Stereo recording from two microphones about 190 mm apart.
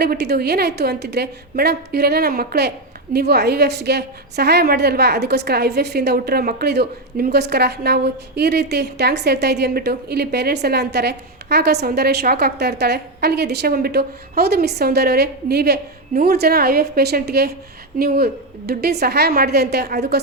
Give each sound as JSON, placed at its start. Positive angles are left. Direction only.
{"t": 0.0, "sound": "a woman's voice", "side_deg": -60}